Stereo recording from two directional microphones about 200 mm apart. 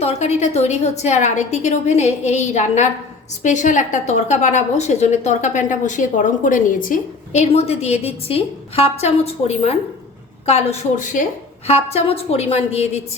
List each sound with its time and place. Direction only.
0.0 s a woman's voice: 30° left (ahead or behind)